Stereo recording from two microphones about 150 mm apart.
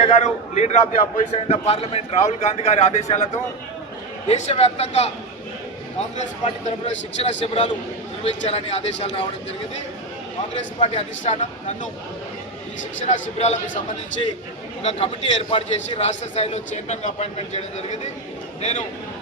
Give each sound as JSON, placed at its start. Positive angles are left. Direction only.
{"t": 0.0, "sound": "a man's voice", "side_deg": 50}
{"t": 4.3, "sound": "a man's voice", "side_deg": 45}
{"t": 10.5, "sound": "a man's voice", "side_deg": 45}
{"t": 13.1, "sound": "a man's voice", "side_deg": 50}
{"t": 14.8, "sound": "a man's voice", "side_deg": 45}